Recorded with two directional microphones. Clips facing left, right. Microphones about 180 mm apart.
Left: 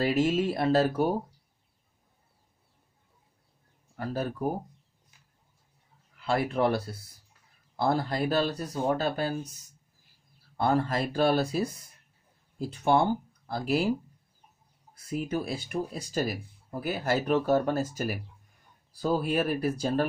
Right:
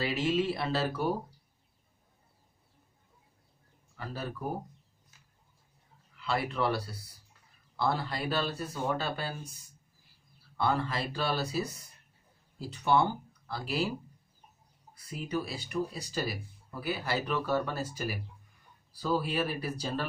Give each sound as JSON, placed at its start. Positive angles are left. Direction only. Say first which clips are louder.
{"t": 0.0, "sound": "speech", "louder": "left 4 dB", "side_deg": 45}
{"t": 3.9, "sound": "speech", "louder": "left 7 dB", "side_deg": 50}
{"t": 6.1, "sound": "speech", "louder": "left 5 dB", "side_deg": 50}
{"t": 10.6, "sound": "speech", "louder": "left 4 dB", "side_deg": 45}
{"t": 15.0, "sound": "speech", "louder": "left 4 dB", "side_deg": 50}